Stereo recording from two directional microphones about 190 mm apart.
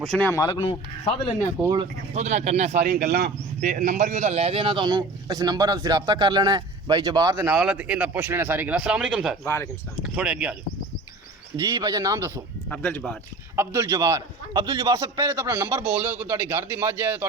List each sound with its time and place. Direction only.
0.0 s speech: 5° left (ahead or behind); by 1.1 s 25° left (ahead or behind)
1.6 s a man's voice: 20° right (ahead or behind)
2.1 s speech: 35° right (ahead or behind)
2.8 s speech: 55° right (ahead or behind)
3.6 s a man's voice: 45° right (ahead or behind); by 7.6 s 15° right (ahead or behind)
7.6 s a man's voice: 5° right (ahead or behind)
9.4 s speech: 15° left (ahead or behind)
10.0 s speech: 5° right (ahead or behind)
11.5 s a man's voice: 20° right (ahead or behind)
12.6 s speech: 10° left (ahead or behind)
13.6 s a man's voice: 15° right (ahead or behind)